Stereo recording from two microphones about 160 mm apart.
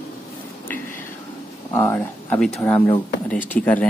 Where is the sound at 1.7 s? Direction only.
15° left (ahead or behind).